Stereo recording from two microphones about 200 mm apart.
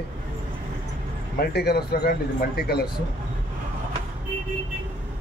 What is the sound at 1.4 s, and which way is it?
Speech, 50° left (ahead or behind).